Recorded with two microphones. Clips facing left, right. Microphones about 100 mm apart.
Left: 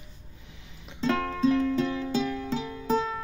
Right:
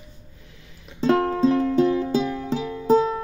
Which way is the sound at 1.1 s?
40° right (ahead or behind).